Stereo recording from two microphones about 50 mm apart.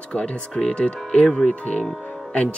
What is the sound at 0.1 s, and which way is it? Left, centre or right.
Speech, centre.